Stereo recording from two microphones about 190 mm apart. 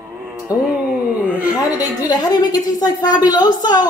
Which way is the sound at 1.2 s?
5° right (ahead or behind).